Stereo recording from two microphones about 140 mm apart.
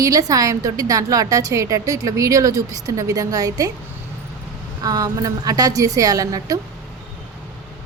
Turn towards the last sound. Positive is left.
turn(degrees=-25)  # may be behind; listen again after turning